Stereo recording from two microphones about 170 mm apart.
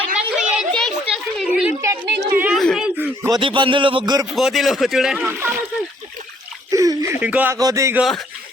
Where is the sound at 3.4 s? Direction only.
30° right (ahead or behind).